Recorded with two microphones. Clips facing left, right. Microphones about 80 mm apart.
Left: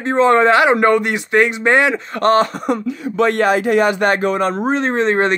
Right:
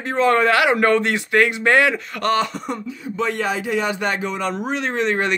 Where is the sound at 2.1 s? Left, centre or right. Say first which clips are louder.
Left 8 dB; left.